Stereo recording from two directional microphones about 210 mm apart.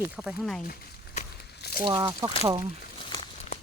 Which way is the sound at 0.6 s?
40° left (ahead or behind).